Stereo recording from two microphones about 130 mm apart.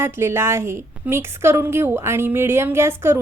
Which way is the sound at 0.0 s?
20° right (ahead or behind).